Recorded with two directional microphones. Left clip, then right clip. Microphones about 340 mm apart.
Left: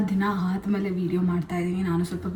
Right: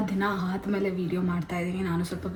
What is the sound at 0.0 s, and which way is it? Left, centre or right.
A woman's voice, centre.